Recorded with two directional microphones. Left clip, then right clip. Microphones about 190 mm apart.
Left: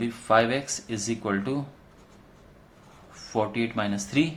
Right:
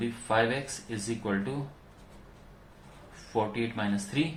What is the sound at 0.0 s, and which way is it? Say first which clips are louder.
Speech: left 5 dB; 45° left (ahead or behind).